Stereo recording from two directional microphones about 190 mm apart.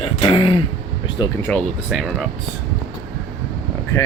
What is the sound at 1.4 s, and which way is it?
Speech, 5° left (ahead or behind).